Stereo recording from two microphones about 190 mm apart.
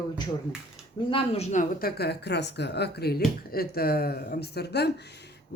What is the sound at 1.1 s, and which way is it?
Speech, 35° left (ahead or behind).